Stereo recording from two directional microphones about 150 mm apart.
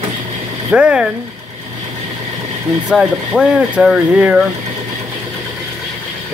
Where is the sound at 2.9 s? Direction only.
5° right (ahead or behind).